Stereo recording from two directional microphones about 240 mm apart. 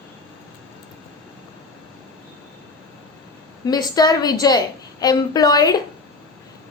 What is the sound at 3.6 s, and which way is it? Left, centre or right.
A woman's voice, centre.